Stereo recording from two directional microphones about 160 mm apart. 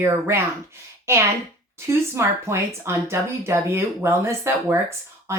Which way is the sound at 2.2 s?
15° right (ahead or behind).